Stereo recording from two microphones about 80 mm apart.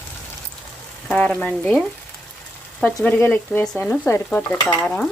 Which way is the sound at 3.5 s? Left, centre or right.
Centre.